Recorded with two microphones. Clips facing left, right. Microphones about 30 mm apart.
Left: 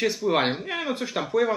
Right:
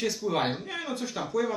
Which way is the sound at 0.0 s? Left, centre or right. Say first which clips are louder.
Left 5 dB; left.